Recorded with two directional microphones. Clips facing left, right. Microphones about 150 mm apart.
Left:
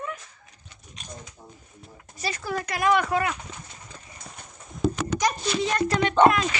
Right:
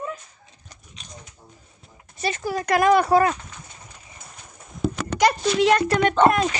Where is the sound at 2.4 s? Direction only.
35° right (ahead or behind).